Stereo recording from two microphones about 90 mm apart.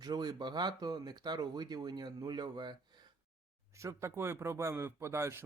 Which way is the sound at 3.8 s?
30° right (ahead or behind).